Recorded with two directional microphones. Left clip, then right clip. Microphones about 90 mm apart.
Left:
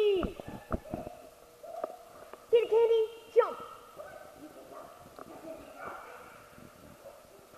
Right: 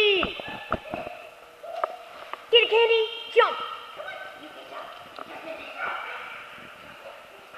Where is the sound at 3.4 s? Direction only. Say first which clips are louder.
Right 11 dB; 25° right (ahead or behind).